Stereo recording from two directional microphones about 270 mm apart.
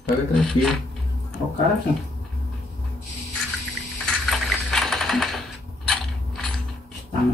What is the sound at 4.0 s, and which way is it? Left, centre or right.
Typewriter, centre.